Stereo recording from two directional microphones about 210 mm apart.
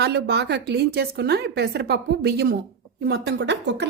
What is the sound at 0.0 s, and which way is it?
A woman's voice, 50° right (ahead or behind).